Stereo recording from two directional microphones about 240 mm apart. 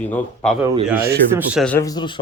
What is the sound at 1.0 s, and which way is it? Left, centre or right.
Speech, right.